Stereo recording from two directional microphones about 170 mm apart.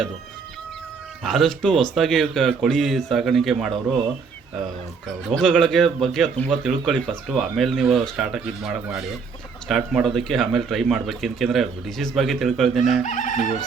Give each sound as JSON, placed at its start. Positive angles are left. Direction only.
{"t": 1.2, "sound": "speech", "side_deg": 0}
{"t": 5.0, "sound": "speech", "side_deg": 5}
{"t": 13.1, "sound": "chicken", "side_deg": 45}